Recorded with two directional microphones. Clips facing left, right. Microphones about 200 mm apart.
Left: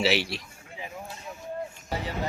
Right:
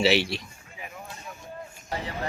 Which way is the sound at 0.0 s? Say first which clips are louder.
Right 3 dB; centre (ahead or behind).